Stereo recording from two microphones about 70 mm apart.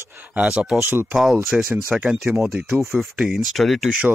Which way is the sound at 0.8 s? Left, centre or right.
Right.